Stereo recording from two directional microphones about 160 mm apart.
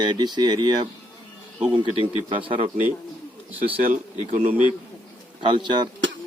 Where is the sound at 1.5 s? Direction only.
5° right (ahead or behind).